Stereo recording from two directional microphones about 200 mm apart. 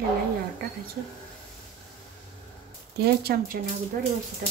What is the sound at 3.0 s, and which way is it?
Speech, 55° right (ahead or behind).